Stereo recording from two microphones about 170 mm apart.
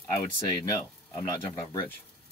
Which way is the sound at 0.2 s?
20° left (ahead or behind).